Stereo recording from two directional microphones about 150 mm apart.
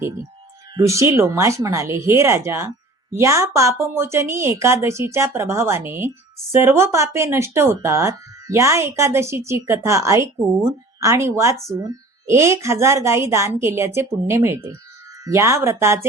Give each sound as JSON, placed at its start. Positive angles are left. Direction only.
{"t": 0.8, "sound": "speech", "side_deg": -20}